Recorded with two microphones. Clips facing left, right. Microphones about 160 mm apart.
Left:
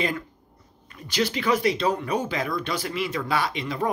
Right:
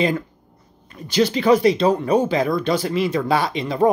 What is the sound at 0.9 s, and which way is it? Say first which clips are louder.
Speech: right 7 dB; 30° right (ahead or behind).